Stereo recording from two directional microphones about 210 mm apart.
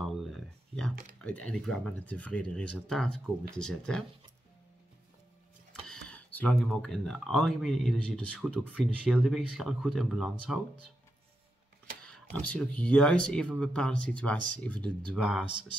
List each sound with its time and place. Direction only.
0.0 s a sound: centre (ahead or behind)
1.2 s speech: 5° left (ahead or behind)
6.0 s speech: 5° left (ahead or behind)
12.3 s speech: 5° left (ahead or behind)